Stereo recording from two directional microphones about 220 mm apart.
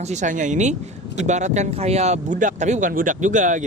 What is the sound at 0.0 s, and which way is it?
Speech, 30° right (ahead or behind).